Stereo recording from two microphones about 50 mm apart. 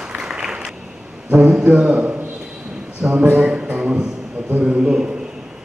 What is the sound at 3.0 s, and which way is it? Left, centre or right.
Speech, right.